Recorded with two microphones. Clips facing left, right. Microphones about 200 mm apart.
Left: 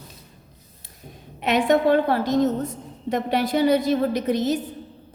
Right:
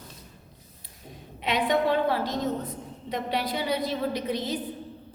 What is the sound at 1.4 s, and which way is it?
A woman's voice, 45° left (ahead or behind).